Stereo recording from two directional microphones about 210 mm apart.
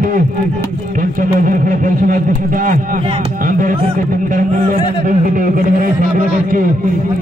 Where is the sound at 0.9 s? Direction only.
40° right (ahead or behind).